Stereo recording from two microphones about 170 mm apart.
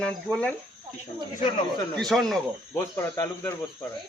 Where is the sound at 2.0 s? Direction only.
Centre (ahead or behind).